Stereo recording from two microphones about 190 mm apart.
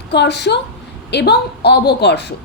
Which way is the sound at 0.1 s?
65° left (ahead or behind).